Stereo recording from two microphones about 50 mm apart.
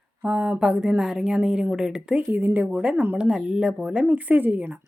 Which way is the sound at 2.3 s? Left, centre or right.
Right.